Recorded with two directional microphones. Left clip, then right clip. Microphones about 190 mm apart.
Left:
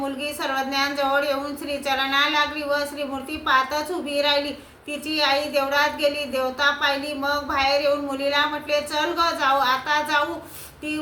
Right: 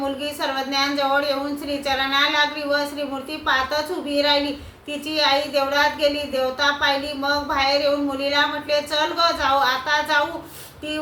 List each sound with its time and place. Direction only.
0.0 s speech: 15° left (ahead or behind)